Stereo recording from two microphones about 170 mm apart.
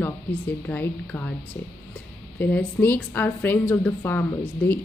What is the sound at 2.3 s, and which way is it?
Speech, 10° left (ahead or behind).